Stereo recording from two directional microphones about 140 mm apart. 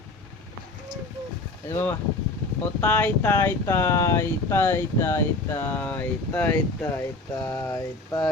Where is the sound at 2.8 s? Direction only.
15° left (ahead or behind).